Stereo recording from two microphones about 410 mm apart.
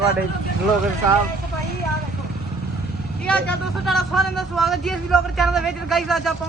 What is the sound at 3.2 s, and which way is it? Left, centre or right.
Speech, centre.